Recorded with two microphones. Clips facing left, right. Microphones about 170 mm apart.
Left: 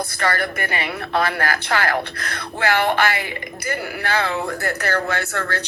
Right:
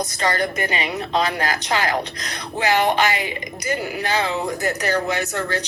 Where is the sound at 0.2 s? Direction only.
20° right (ahead or behind).